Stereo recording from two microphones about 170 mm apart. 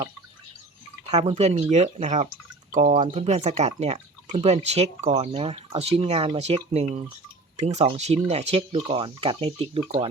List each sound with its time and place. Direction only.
1.0 s speech: 35° right (ahead or behind)